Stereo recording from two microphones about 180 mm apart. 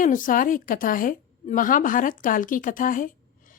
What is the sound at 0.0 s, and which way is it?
Speech, 50° left (ahead or behind).